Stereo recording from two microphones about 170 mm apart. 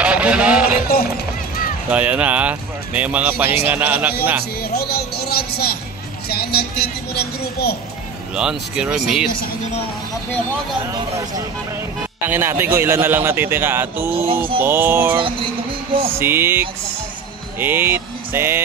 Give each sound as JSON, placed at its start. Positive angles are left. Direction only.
{"t": 0.0, "sound": "a sound", "side_deg": -5}
{"t": 1.9, "sound": "speech", "side_deg": -10}
{"t": 4.7, "sound": "speech", "side_deg": 70}
{"t": 6.2, "sound": "vehicle", "side_deg": 65}
{"t": 8.4, "sound": "speech", "side_deg": -5}
{"t": 10.9, "sound": "speech", "side_deg": -20}
{"t": 16.2, "sound": "speech", "side_deg": -15}